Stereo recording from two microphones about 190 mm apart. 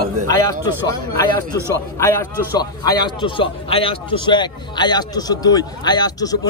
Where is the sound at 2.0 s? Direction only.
15° left (ahead or behind).